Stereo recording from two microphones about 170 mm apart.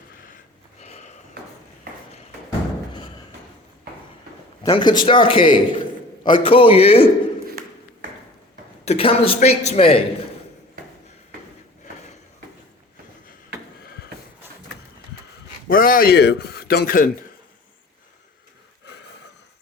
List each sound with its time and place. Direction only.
0.8 s sniff: 40° left (ahead or behind)
4.6 s a man's voice: 25° left (ahead or behind)
8.8 s a man's voice: 35° left (ahead or behind)
15.7 s a man's voice: 55° left (ahead or behind)